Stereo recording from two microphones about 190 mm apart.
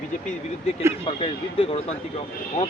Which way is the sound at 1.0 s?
30° left (ahead or behind).